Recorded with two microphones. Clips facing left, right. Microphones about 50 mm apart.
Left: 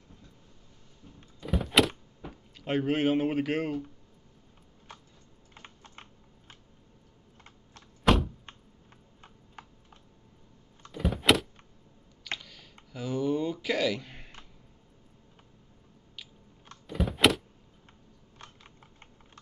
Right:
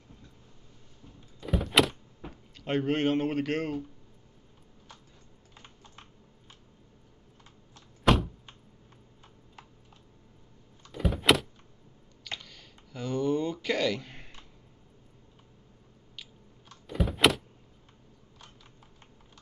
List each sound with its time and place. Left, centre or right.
1.4 s power windows: centre
2.6 s a man's voice: centre
5.5 s typing: left
8.0 s a sound: centre
9.2 s tick-tock: left
10.9 s power windows: centre
12.3 s computer keyboard: centre
16.8 s power windows: centre